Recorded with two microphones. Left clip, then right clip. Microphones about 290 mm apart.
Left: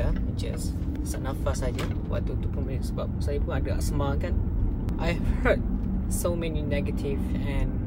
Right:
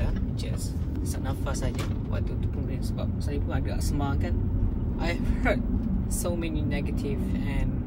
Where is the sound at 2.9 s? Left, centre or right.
Centre.